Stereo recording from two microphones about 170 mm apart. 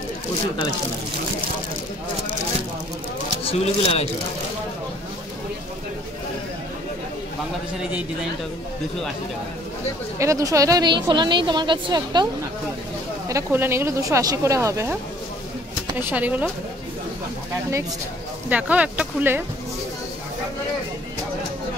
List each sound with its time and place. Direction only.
3.4 s speech: 35° left (ahead or behind)
10.1 s a woman's voice: 20° right (ahead or behind)
13.3 s speech: 15° right (ahead or behind)
16.0 s speech: 10° right (ahead or behind)
18.5 s speech: 10° right (ahead or behind)